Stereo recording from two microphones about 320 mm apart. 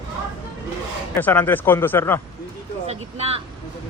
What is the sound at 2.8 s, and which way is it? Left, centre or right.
Speech, centre.